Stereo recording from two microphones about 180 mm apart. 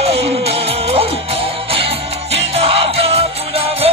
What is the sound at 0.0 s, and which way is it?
Music, 35° right (ahead or behind).